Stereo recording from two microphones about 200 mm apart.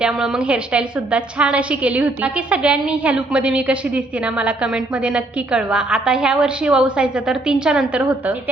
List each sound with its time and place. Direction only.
0.0 s a woman's voice: centre (ahead or behind)